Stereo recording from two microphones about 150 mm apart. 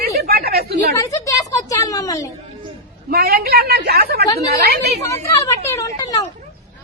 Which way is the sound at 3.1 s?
90° right.